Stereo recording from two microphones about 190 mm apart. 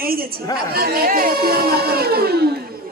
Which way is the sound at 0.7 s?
55° right (ahead or behind).